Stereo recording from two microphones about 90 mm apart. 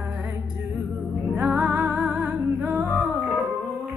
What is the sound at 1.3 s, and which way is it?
Music, 20° right (ahead or behind).